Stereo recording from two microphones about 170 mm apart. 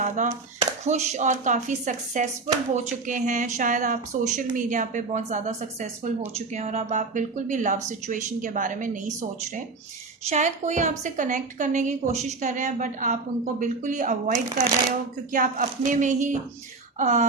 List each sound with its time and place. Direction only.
0.0 s a woman's voice: 45° right (ahead or behind)
10.2 s a woman's voice: 45° right (ahead or behind)